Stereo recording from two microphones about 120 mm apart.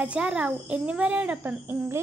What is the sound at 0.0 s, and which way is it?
A child's voice, 10° right (ahead or behind).